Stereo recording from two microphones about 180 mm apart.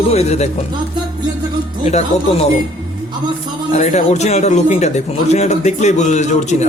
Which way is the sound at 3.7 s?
40° left (ahead or behind).